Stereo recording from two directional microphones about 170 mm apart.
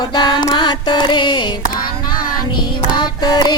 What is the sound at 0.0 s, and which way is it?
Music, 25° left (ahead or behind).